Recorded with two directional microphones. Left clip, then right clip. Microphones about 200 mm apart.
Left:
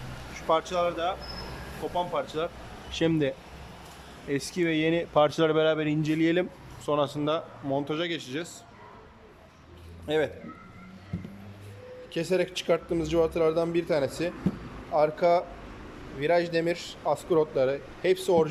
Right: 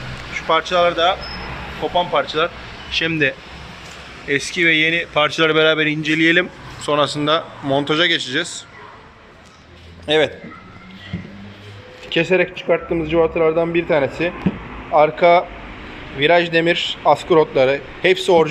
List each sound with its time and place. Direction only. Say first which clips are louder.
0.3 s speech: right 10 dB; 20° left (ahead or behind)
10.1 s speech: right 11 dB; 10° left (ahead or behind)
12.1 s speech: right 11 dB; 5° left (ahead or behind)
15.2 s speech: right 11 dB; 10° left (ahead or behind)